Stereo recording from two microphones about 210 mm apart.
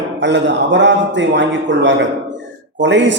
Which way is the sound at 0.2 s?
60° right (ahead or behind).